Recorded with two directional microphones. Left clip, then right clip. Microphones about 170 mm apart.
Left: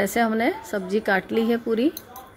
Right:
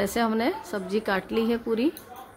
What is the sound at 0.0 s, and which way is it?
A woman's voice, 10° left (ahead or behind).